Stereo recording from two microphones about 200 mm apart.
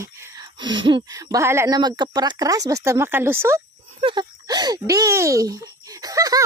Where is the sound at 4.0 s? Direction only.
25° right (ahead or behind).